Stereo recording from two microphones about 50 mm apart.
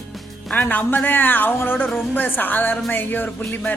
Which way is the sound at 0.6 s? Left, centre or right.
Left.